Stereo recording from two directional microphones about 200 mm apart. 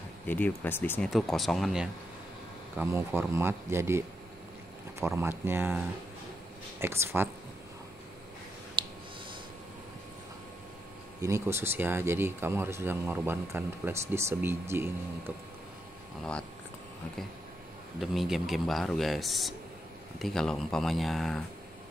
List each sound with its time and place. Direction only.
0.3 s speech: 10° left (ahead or behind); by 4.0 s 10° right (ahead or behind)
5.0 s speech: 15° right (ahead or behind)
8.8 s clicking: 25° right (ahead or behind)
11.2 s speech: 15° right (ahead or behind)
18.0 s speech: centre (ahead or behind)